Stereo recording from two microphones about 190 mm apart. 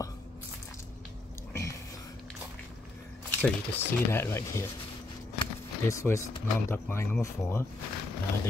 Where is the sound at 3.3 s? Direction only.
10° left (ahead or behind).